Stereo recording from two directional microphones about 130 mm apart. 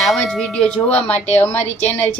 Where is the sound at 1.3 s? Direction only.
15° left (ahead or behind).